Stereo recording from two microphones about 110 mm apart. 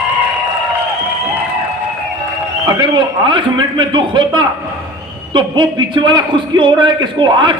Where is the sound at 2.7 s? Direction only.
45° right (ahead or behind).